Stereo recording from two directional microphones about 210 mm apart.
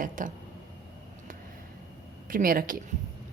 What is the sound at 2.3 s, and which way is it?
Speech, 40° right (ahead or behind).